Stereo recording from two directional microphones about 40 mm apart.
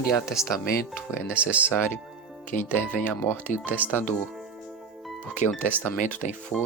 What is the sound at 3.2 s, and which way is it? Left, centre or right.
Speech, left.